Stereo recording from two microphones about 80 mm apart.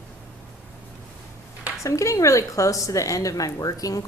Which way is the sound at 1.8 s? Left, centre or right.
Left.